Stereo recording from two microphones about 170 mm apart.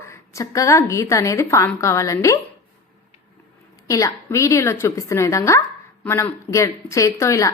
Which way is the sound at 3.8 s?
20° left (ahead or behind).